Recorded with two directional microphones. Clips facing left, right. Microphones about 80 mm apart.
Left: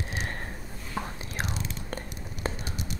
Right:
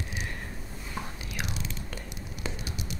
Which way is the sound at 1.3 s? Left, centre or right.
Left.